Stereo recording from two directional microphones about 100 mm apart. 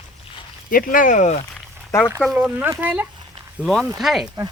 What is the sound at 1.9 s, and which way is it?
Speech, 25° left (ahead or behind).